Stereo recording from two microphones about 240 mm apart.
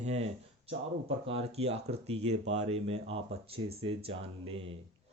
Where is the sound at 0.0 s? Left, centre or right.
Right.